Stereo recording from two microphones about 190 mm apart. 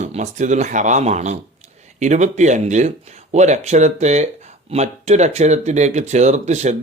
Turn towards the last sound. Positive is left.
turn(degrees=-35)  # may be behind; listen again after turning